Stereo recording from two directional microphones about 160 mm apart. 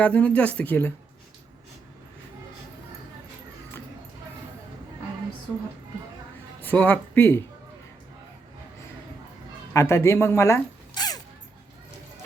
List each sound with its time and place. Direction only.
0.0 s speech: 10° left (ahead or behind)
6.6 s speech: 10° left (ahead or behind)
9.7 s speech: 15° left (ahead or behind)